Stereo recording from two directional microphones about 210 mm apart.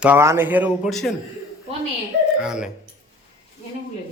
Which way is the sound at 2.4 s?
5° right (ahead or behind).